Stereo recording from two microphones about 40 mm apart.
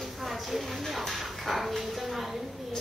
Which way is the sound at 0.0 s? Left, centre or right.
Centre.